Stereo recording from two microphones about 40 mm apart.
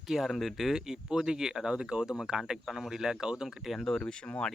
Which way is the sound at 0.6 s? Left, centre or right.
Centre.